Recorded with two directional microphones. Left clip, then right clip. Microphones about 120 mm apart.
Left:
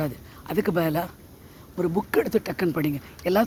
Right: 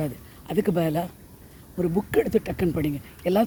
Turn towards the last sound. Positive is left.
turn(degrees=-15)  # may be behind; listen again after turning